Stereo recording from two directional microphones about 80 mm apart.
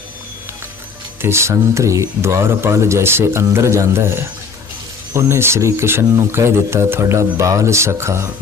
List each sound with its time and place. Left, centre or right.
1.2 s speech: right